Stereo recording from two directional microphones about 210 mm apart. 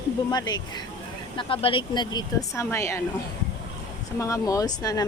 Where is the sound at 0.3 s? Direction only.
20° left (ahead or behind).